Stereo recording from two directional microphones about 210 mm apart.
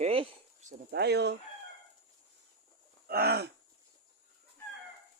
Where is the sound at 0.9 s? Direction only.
55° right (ahead or behind).